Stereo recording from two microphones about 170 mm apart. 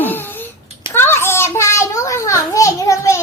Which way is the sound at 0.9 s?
15° left (ahead or behind).